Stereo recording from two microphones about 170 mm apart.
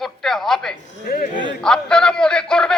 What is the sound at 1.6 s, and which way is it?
A man's voice, 5° left (ahead or behind).